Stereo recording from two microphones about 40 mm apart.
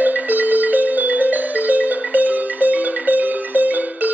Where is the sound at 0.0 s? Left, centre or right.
Right.